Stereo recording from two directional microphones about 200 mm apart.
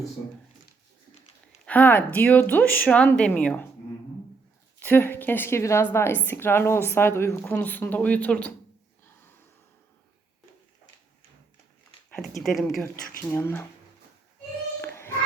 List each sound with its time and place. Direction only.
1.6 s a woman's voice: 10° left (ahead or behind)
4.8 s a woman's voice: 10° left (ahead or behind)
12.1 s speech: centre (ahead or behind)
12.8 s a woman's voice: 15° left (ahead or behind)
14.8 s child singing: 10° left (ahead or behind)